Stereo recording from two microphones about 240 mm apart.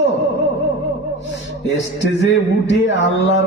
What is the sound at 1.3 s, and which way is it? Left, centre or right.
Mantra, left.